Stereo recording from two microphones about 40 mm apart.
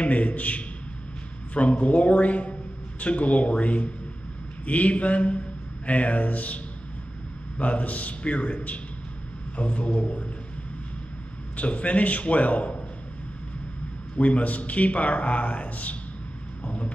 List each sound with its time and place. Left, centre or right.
0.0 s a man's voice: left
11.5 s a man's voice: left
14.1 s a man's voice: left
16.6 s a sound: left